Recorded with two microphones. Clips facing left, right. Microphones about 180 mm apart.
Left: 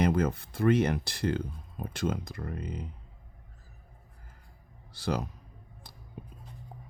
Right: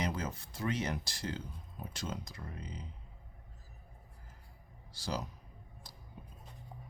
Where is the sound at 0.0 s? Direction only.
55° left (ahead or behind).